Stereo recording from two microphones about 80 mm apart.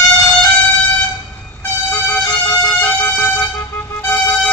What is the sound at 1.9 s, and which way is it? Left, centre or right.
Vehicle, left.